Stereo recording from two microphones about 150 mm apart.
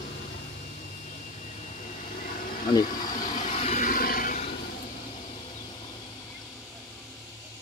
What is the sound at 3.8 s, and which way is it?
Toilet flush, 70° left (ahead or behind).